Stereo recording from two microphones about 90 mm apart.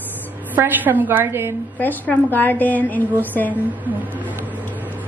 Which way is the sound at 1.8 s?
20° left (ahead or behind).